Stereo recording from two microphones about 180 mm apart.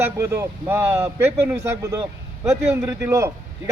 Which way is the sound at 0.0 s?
15° right (ahead or behind).